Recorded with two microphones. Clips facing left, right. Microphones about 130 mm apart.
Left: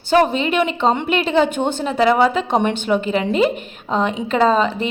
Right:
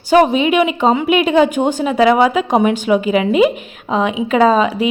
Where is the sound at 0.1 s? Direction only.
10° right (ahead or behind).